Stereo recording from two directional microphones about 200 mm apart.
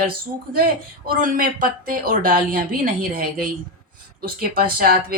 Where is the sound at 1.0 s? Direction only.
45° right (ahead or behind).